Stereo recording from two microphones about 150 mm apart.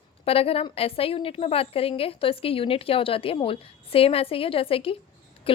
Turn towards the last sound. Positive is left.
turn(degrees=35)  # may be behind; listen again after turning